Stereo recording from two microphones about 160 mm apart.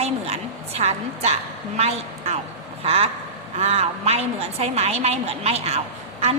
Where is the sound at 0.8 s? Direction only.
40° right (ahead or behind).